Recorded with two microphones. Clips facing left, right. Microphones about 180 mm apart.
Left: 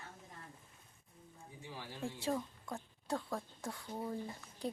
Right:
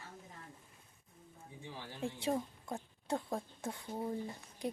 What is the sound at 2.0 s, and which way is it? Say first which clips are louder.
A woman's voice: right 2 dB; 20° right (ahead or behind).